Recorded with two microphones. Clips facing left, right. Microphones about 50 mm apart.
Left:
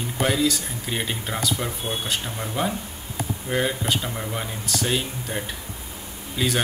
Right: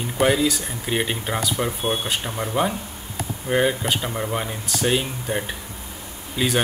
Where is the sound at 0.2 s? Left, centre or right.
Centre.